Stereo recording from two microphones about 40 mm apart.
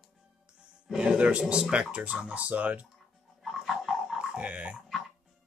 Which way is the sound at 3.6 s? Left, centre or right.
Centre.